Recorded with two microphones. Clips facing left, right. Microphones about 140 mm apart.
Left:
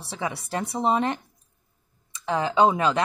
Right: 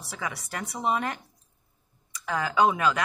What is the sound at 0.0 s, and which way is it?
Speech, 30° left (ahead or behind).